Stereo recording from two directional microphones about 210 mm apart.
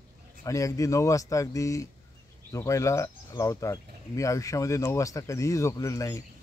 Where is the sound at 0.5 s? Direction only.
15° left (ahead or behind).